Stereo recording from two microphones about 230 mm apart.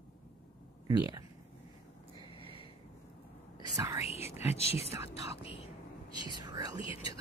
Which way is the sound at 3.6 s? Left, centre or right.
Centre.